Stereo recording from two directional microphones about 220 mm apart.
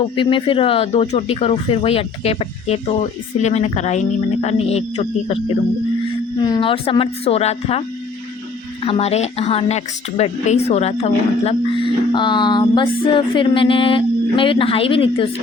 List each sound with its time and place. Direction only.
0.0 s a woman's voice: 25° left (ahead or behind)
6.4 s a woman's voice: 20° left (ahead or behind)